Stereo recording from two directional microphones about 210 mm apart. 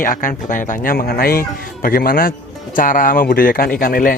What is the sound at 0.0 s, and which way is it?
Speech, 40° left (ahead or behind).